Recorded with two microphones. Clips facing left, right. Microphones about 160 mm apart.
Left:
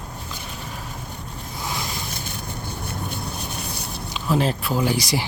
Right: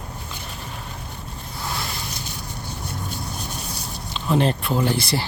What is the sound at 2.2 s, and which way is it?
Vehicle, 55° left (ahead or behind).